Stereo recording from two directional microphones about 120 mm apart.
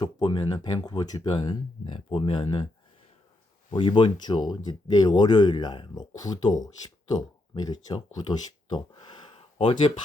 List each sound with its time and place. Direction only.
0.0 s speech: 40° left (ahead or behind)
1.8 s speech: 50° left (ahead or behind)
3.7 s speech: 45° left (ahead or behind)
7.6 s speech: 35° left (ahead or behind)